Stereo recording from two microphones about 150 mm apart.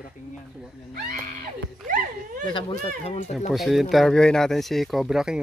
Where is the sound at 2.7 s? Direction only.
45° left (ahead or behind).